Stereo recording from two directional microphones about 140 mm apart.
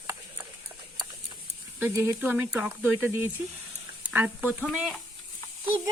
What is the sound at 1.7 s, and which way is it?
Speech, 15° right (ahead or behind).